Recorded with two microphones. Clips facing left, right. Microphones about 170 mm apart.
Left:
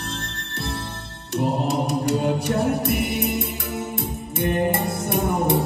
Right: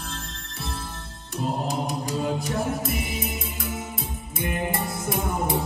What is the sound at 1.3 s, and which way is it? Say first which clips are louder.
Music: left 5 dB; 70° left (ahead or behind).